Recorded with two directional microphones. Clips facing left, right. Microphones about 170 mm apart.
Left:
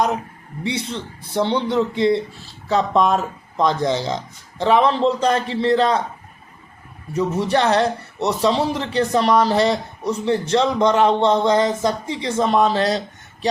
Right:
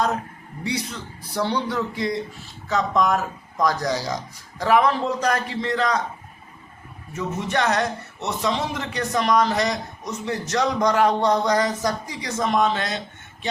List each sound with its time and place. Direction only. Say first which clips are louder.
0.6 s speech: left 3 dB; 25° left (ahead or behind)
7.1 s a man's voice: left 7 dB; 35° left (ahead or behind)